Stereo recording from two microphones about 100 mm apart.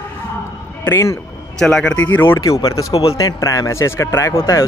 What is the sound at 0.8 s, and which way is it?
Speech, 30° left (ahead or behind).